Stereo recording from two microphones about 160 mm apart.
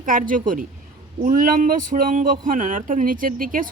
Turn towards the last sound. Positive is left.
turn(degrees=-60)  # may be behind; listen again after turning